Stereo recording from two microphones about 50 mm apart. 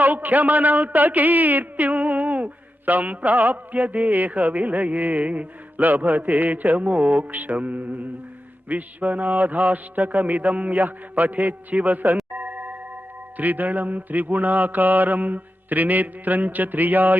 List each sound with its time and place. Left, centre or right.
0.0 s a woman's voice: right
12.3 s music: right
13.3 s a woman's voice: right